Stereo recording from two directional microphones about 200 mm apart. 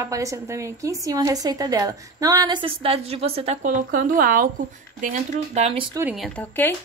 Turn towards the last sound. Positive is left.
turn(degrees=10)  # may be behind; listen again after turning